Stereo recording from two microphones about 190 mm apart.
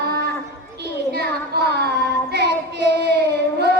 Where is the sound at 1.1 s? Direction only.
60° right (ahead or behind).